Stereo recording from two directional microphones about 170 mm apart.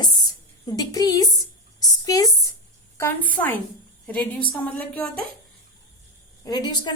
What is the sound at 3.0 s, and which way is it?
A woman's voice, 10° left (ahead or behind).